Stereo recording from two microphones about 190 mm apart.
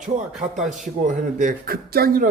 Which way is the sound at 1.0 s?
45° right (ahead or behind).